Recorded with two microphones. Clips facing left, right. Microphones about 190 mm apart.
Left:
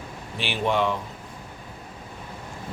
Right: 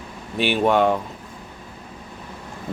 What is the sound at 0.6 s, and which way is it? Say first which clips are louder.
Speech: right 5 dB; 50° right (ahead or behind).